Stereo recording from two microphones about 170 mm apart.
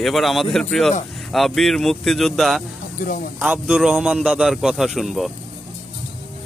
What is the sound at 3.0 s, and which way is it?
Speech, 55° left (ahead or behind).